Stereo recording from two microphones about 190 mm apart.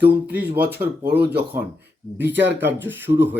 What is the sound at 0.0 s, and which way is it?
Speech, 10° right (ahead or behind).